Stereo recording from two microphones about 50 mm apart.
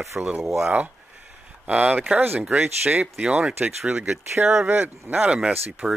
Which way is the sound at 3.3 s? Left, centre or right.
Right.